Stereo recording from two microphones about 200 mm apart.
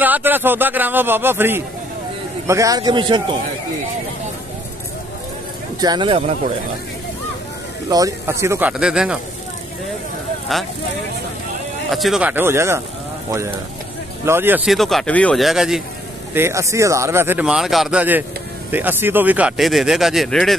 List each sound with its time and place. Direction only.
0.0 s a man's voice: 10° right (ahead or behind)
5.8 s a man's voice: 20° right (ahead or behind)
7.9 s speech: 15° right (ahead or behind)
11.9 s speech: centre (ahead or behind)
14.2 s speech: 10° right (ahead or behind)
16.3 s speech: 15° right (ahead or behind)